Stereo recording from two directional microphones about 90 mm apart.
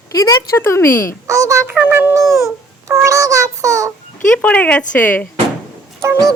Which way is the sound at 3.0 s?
35° right (ahead or behind).